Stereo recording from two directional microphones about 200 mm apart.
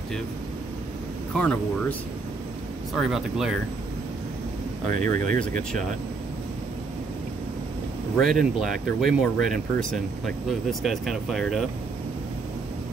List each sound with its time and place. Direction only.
1.3 s speech: 5° left (ahead or behind)
4.9 s speech: 40° right (ahead or behind)
8.2 s speech: centre (ahead or behind)